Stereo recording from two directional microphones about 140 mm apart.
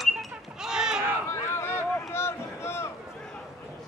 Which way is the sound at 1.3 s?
20° left (ahead or behind).